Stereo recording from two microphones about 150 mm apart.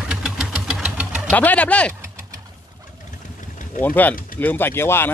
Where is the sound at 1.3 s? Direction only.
10° left (ahead or behind).